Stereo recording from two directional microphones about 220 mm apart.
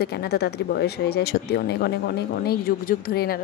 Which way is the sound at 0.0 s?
45° left (ahead or behind).